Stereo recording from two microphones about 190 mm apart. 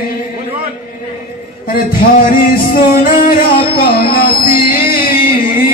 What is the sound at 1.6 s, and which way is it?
Music, 50° left (ahead or behind).